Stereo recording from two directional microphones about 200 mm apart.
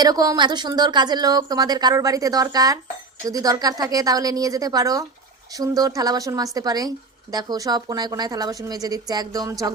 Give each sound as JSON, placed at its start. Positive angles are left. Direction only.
{"t": 0.0, "sound": "a woman's voice", "side_deg": -20}